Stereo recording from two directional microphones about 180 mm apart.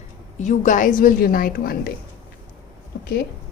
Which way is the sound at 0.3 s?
45° left (ahead or behind).